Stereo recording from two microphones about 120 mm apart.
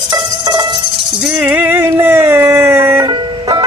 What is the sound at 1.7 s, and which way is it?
Music, 20° right (ahead or behind).